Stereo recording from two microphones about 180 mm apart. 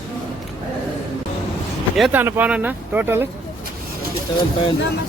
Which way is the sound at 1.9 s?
Centre (ahead or behind).